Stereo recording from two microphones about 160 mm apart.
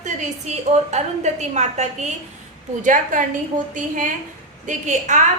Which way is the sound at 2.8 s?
55° right (ahead or behind).